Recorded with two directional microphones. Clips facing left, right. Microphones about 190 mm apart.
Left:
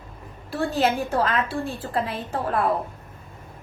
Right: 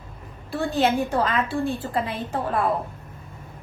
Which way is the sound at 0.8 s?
Centre (ahead or behind).